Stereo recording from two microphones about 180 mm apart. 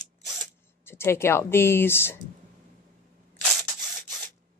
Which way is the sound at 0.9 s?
15° left (ahead or behind).